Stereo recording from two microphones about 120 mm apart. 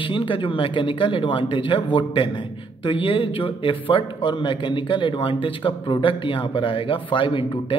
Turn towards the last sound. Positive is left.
turn(degrees=45)  # may be behind; listen again after turning